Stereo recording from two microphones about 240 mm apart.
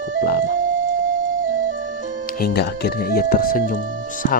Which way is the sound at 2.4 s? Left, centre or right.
Left.